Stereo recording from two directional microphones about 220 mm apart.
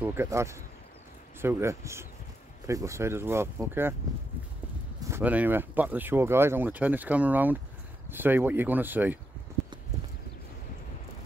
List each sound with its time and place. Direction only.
0.0 s speech: 10° right (ahead or behind)
5.0 s speech: 10° right (ahead or behind)